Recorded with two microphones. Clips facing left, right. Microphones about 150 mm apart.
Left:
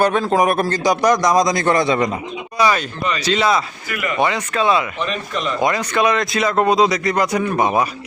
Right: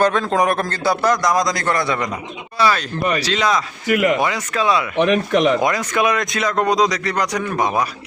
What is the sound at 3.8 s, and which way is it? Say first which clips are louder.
Speech: right 8 dB; 90° right.